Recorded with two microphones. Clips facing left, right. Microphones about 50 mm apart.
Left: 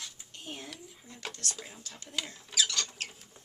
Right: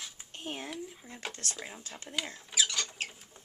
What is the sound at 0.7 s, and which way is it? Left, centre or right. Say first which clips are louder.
Speech: right 6 dB; centre.